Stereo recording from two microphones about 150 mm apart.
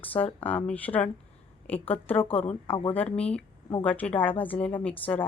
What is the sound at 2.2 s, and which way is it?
Speech, 40° left (ahead or behind).